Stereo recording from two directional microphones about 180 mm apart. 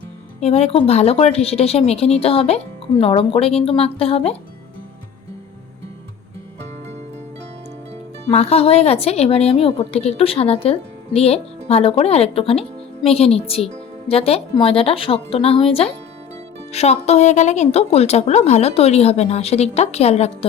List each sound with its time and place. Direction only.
0.3 s a woman's voice: 35° left (ahead or behind)
8.3 s a woman's voice: 35° left (ahead or behind)